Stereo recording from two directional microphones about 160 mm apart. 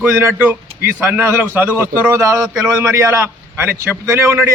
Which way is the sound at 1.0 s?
15° right (ahead or behind).